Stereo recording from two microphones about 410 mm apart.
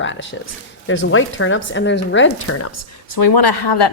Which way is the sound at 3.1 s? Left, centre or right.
Left.